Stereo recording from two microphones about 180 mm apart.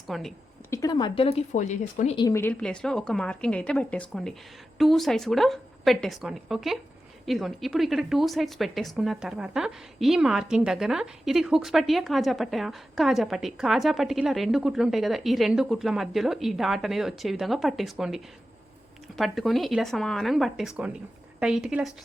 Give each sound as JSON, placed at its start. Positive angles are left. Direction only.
{"t": 0.1, "sound": "speech", "side_deg": 0}
{"t": 0.7, "sound": "speech", "side_deg": 20}
{"t": 2.1, "sound": "speech", "side_deg": 15}